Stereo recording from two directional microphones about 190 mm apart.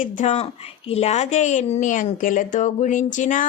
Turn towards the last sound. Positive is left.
turn(degrees=40)  # may be behind; listen again after turning